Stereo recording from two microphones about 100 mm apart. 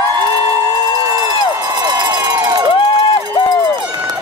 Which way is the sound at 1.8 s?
45° right (ahead or behind).